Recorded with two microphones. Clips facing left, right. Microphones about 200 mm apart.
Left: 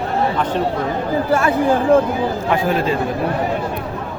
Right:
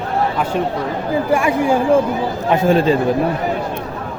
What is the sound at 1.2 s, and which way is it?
A man's voice, 15° right (ahead or behind).